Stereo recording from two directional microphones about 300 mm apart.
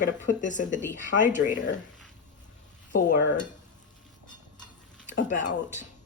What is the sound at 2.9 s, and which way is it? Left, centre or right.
Speech, left.